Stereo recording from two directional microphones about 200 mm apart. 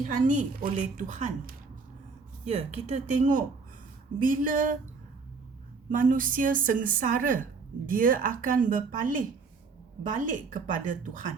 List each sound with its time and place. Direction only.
0.0 s a woman's voice: 40° right (ahead or behind)
5.9 s a woman's voice: 40° right (ahead or behind)